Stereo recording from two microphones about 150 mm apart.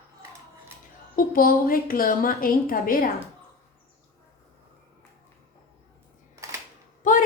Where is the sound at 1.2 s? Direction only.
70° left (ahead or behind).